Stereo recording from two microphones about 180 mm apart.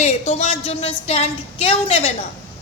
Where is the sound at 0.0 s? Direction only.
40° left (ahead or behind).